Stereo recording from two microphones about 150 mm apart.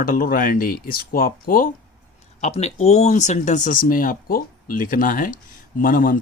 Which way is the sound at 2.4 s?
45° left (ahead or behind).